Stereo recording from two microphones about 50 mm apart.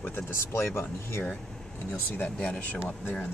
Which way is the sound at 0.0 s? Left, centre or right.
Left.